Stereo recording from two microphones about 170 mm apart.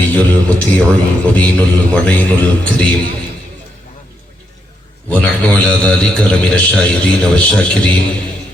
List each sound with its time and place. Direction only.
0.1 s a man's voice: 10° left (ahead or behind)
5.1 s a man's voice: 5° left (ahead or behind)